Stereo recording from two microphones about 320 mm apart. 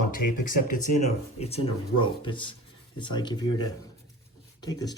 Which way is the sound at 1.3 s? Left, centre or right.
Centre.